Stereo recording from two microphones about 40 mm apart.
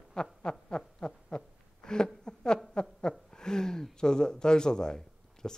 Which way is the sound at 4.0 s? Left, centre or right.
Centre.